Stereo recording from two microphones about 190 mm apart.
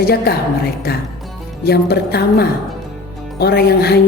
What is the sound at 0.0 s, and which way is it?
Speech, 55° left (ahead or behind).